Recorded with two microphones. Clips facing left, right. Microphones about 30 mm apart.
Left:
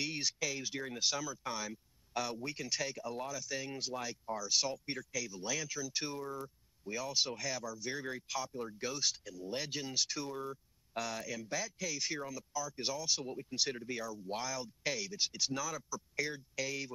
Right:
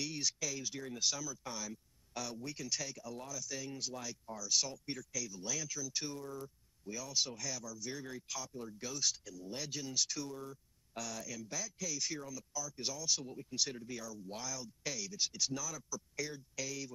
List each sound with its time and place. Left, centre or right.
0.0 s speech: left